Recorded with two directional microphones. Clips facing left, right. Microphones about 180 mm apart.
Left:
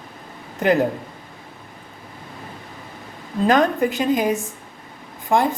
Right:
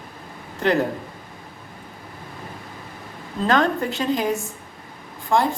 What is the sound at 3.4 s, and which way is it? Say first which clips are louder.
A woman's voice: left 3 dB; 15° left (ahead or behind).